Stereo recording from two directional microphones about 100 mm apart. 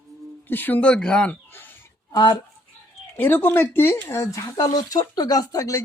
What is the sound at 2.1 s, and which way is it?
Speech, 45° left (ahead or behind).